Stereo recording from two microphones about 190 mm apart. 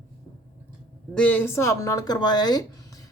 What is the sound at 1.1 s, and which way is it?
A woman's voice, 10° left (ahead or behind).